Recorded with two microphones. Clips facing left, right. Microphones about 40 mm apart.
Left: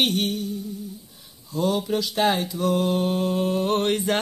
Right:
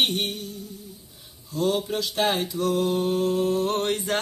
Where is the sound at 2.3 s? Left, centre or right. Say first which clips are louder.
Left 2 dB; centre; by 4.2 s left.